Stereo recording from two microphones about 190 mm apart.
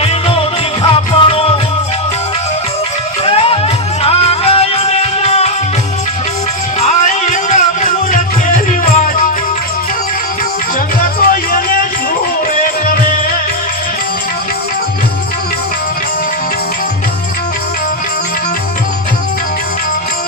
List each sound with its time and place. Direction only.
0.8 s music: 30° left (ahead or behind)
3.2 s music: 30° left (ahead or behind)
6.7 s music: 40° left (ahead or behind)
11.0 s music: 50° left (ahead or behind)